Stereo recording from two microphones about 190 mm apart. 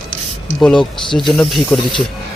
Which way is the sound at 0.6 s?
5° left (ahead or behind).